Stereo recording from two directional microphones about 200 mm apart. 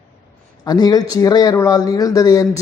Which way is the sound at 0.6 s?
20° left (ahead or behind).